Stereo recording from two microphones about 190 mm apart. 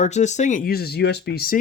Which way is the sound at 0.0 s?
35° left (ahead or behind).